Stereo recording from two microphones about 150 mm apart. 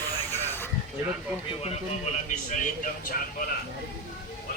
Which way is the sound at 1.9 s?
45° left (ahead or behind).